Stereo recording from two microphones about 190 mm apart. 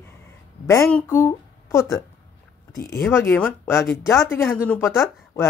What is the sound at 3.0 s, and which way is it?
Speech, 10° left (ahead or behind).